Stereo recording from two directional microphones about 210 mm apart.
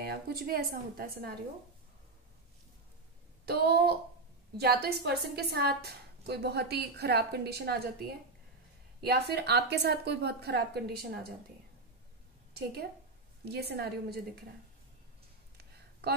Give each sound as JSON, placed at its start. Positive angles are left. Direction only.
{"t": 0.0, "sound": "a woman's voice", "side_deg": -45}
{"t": 3.4, "sound": "a woman's voice", "side_deg": -50}
{"t": 13.5, "sound": "a woman's voice", "side_deg": -50}